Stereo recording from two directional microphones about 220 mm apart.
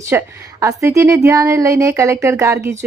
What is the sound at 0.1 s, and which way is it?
Speech, 10° right (ahead or behind).